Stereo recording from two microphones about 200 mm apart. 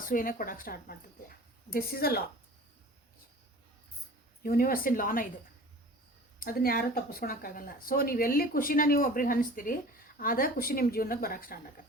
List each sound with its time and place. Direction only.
0.0 s speech: 45° left (ahead or behind)
4.4 s speech: 45° left (ahead or behind)
6.4 s speech: 45° left (ahead or behind)